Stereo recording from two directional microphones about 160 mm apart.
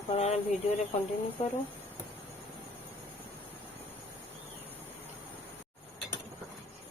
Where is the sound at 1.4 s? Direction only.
45° left (ahead or behind).